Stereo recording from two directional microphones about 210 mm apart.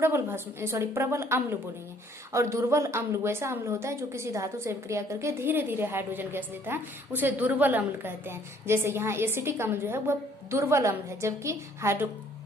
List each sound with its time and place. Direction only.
0.0 s a woman's voice: 10° right (ahead or behind)